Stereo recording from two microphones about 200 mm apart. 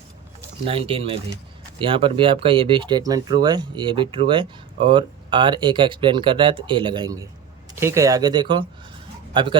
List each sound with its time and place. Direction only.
0.6 s speech: 30° right (ahead or behind)